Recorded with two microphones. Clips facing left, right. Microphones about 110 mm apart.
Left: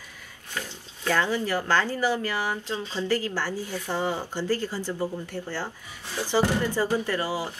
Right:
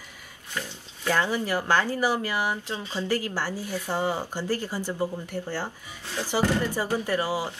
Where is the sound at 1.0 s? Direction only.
15° right (ahead or behind).